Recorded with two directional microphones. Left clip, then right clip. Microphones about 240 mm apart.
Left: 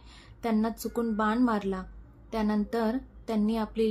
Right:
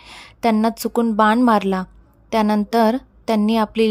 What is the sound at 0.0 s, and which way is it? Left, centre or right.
A woman's voice, right.